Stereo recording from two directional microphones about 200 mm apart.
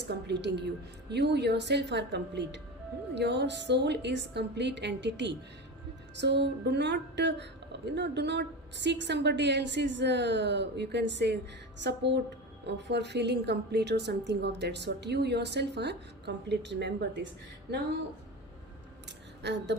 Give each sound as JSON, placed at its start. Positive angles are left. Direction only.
{"t": 0.1, "sound": "a woman's voice", "side_deg": -60}
{"t": 19.4, "sound": "a woman's voice", "side_deg": -60}